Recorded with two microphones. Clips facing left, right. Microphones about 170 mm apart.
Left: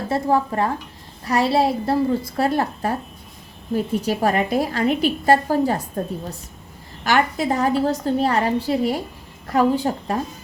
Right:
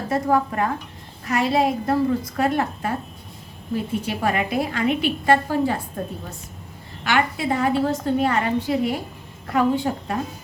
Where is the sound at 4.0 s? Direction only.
40° left (ahead or behind).